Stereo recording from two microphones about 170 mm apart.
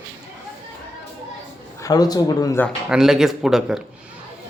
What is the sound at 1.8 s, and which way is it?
Speech, 25° left (ahead or behind).